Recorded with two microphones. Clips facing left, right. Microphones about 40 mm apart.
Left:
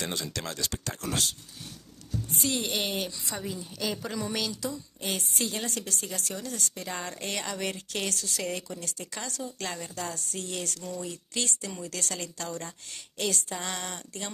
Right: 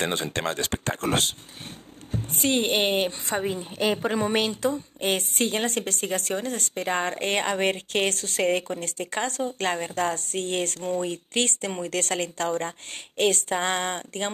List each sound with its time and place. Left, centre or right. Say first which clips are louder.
0.0 s a woman's voice: right 8 dB; right